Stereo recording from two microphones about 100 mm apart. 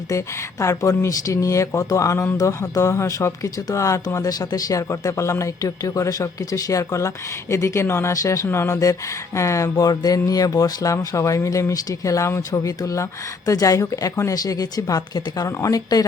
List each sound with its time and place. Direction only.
0.1 s speech: 30° left (ahead or behind)